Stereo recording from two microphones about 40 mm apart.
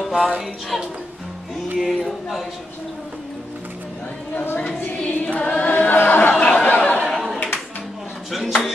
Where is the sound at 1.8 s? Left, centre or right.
Centre.